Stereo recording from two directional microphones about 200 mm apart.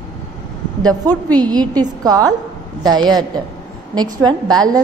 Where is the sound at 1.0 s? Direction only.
20° right (ahead or behind).